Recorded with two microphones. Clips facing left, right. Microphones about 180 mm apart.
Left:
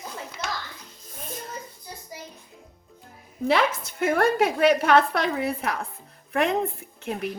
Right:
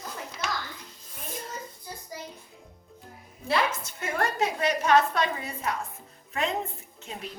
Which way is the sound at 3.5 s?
80° left.